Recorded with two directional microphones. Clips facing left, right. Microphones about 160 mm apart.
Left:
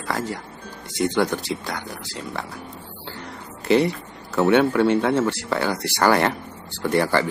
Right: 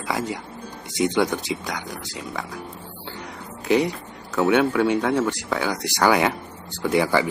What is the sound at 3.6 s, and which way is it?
Speech, 10° right (ahead or behind).